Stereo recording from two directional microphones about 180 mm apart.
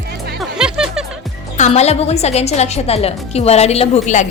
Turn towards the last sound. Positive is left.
turn(degrees=40)  # may be behind; listen again after turning